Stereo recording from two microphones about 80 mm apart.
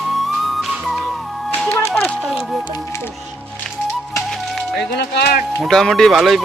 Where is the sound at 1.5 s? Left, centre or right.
Centre.